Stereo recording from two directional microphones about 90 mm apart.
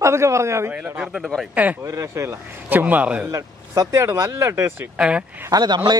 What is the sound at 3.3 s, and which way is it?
Speech, 35° right (ahead or behind).